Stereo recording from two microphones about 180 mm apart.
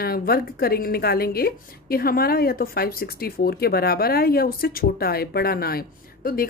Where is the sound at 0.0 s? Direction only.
55° left (ahead or behind).